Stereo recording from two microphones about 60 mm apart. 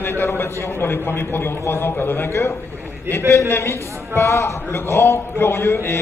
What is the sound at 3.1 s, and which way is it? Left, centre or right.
A man's voice, left.